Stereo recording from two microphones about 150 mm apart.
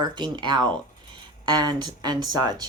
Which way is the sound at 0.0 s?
30° right (ahead or behind).